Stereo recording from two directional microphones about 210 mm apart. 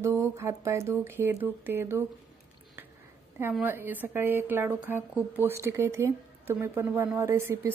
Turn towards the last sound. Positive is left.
turn(degrees=-15)  # may be behind; listen again after turning